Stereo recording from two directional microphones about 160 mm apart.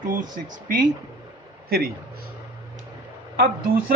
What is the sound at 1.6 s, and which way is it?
Speech, 70° right (ahead or behind).